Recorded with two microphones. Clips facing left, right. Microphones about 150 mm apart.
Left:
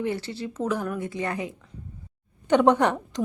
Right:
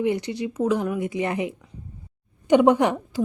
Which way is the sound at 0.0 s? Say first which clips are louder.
Right 5 dB; 15° right (ahead or behind).